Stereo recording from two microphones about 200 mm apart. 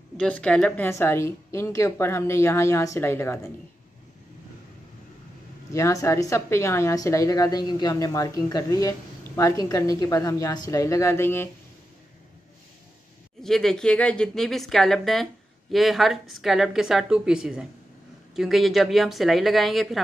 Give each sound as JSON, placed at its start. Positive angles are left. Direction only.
{"t": 0.2, "sound": "a woman's voice", "side_deg": 5}
{"t": 5.7, "sound": "a woman's voice", "side_deg": 15}
{"t": 13.4, "sound": "speech", "side_deg": 0}